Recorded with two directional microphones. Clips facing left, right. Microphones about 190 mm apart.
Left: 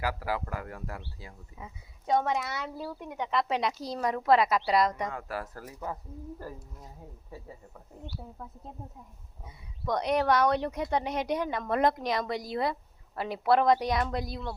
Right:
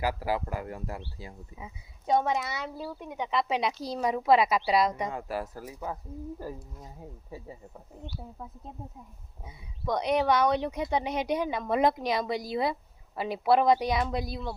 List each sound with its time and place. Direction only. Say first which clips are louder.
0.0 s speech: right 3 dB; 20° right (ahead or behind)
5.0 s speech: right 2 dB; 20° right (ahead or behind)
9.8 s speech: right 1 dB; centre (ahead or behind)